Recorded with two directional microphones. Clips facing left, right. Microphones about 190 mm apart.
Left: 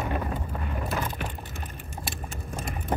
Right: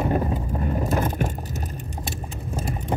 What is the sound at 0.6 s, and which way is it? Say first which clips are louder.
Crushing: right 9 dB; 40° right (ahead or behind).